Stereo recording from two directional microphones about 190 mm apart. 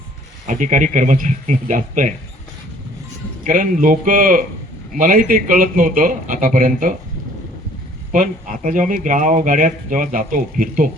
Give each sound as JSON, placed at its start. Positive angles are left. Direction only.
{"t": 0.4, "sound": "speech", "side_deg": -40}
{"t": 3.4, "sound": "speech", "side_deg": -45}
{"t": 8.1, "sound": "speech", "side_deg": -45}